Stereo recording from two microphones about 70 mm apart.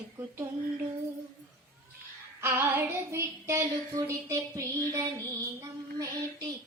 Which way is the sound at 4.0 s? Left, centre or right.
Right.